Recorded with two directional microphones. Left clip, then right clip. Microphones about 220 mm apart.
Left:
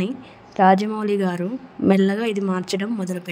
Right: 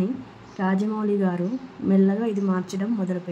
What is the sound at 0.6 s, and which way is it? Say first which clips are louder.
Speech: left 10 dB; 45° left (ahead or behind).